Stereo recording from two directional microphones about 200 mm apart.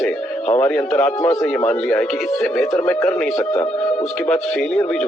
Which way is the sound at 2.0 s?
Centre (ahead or behind).